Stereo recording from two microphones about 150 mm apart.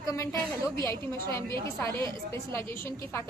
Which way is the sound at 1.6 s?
20° left (ahead or behind).